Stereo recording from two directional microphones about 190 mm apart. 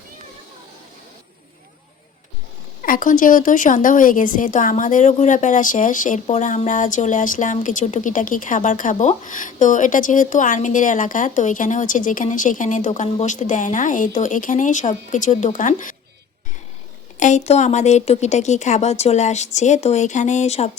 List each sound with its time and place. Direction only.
2.8 s a woman's voice: 45° left (ahead or behind)
17.2 s speech: 40° left (ahead or behind)